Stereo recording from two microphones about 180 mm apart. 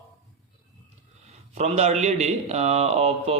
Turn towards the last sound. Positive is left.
turn(degrees=-35)  # may be behind; listen again after turning